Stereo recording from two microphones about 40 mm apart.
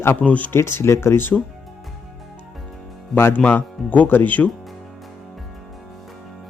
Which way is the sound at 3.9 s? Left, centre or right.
Left.